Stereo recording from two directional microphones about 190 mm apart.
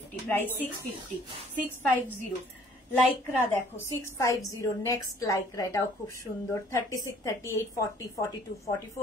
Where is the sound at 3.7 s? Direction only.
20° left (ahead or behind).